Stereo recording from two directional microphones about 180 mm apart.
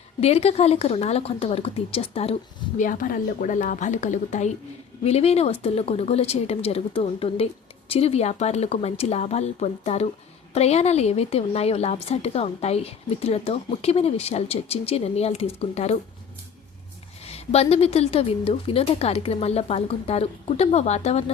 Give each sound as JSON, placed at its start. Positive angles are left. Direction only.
{"t": 0.2, "sound": "a woman's voice", "side_deg": 35}
{"t": 17.2, "sound": "a woman's voice", "side_deg": 35}